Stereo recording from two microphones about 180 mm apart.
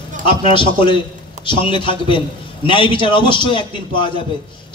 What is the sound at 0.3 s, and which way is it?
A man's voice, 30° left (ahead or behind).